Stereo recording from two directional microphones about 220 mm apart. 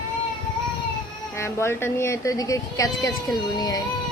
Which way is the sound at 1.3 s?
10° left (ahead or behind).